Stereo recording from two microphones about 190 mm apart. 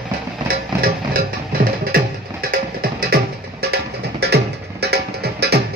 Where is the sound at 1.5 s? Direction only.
50° right (ahead or behind).